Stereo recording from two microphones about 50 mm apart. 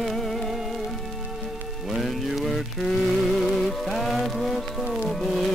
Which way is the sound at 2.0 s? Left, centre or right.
Centre.